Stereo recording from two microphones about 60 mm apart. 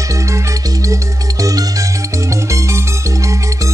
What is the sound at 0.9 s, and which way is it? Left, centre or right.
Music, right.